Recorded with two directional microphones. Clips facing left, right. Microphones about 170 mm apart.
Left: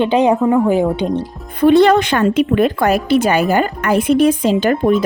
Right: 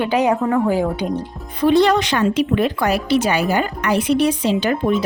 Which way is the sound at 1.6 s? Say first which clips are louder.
Left 4 dB; 55° left (ahead or behind).